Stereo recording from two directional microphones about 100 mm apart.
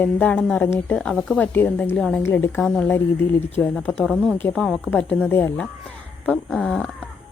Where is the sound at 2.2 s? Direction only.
20° left (ahead or behind).